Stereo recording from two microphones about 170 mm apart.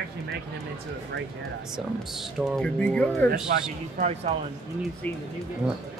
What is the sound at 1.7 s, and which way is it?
Speech, centre (ahead or behind).